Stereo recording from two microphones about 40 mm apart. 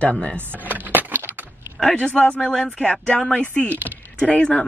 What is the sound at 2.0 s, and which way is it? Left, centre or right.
Speech, left.